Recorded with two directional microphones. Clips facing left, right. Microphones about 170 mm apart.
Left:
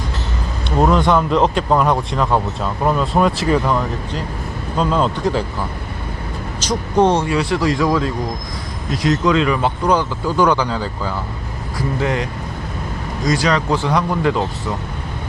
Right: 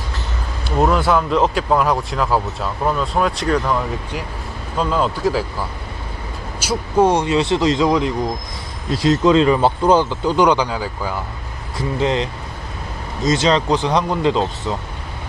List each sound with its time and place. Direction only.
0.8 s speech: 5° right (ahead or behind)
6.6 s speech: 10° right (ahead or behind)
7.3 s speech: 25° right (ahead or behind)
11.8 s speech: 20° right (ahead or behind)